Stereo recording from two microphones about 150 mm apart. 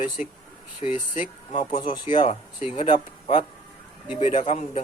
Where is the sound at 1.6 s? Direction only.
35° left (ahead or behind).